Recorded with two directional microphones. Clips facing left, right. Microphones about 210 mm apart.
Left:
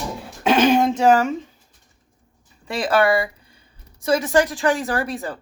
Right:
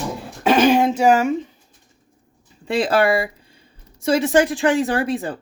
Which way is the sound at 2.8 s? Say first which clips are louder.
Even; 30° right (ahead or behind).